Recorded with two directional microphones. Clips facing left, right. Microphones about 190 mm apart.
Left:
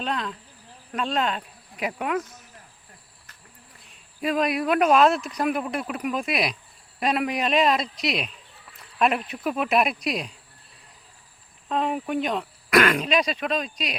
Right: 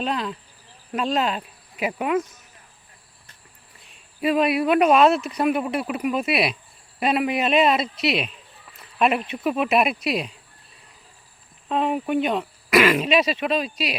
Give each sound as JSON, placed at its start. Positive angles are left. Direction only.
{"t": 0.0, "sound": "speech", "side_deg": -5}
{"t": 4.2, "sound": "speech", "side_deg": -5}
{"t": 11.7, "sound": "speech", "side_deg": -5}